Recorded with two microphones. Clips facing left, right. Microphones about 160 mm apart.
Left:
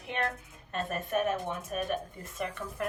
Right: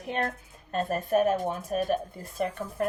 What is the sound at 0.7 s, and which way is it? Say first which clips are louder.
Speech: right 6 dB; 35° right (ahead or behind).